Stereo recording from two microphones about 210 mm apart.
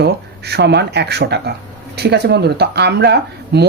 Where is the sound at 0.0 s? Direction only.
50° right (ahead or behind).